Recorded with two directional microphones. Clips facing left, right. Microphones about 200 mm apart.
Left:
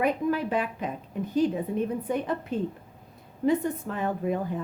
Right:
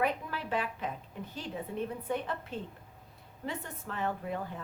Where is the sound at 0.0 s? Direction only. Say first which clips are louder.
Left 8 dB; 15° left (ahead or behind).